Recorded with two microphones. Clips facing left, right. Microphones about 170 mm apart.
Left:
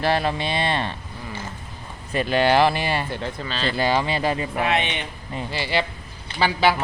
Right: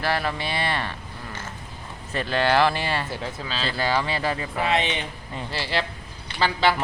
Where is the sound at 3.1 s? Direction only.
5° right (ahead or behind).